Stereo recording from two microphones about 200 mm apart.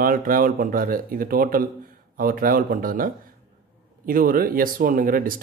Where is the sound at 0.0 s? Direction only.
45° right (ahead or behind).